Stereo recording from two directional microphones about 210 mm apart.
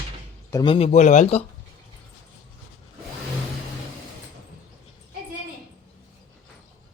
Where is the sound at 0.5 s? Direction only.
25° left (ahead or behind).